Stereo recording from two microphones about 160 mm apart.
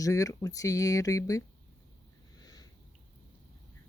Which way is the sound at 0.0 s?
20° left (ahead or behind).